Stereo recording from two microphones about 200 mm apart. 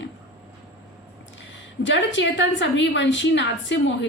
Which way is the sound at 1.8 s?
65° left (ahead or behind).